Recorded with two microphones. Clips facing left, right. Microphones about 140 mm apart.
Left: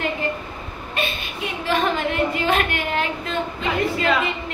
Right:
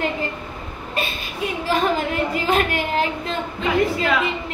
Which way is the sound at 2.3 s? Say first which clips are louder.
Right 1 dB; 35° right (ahead or behind).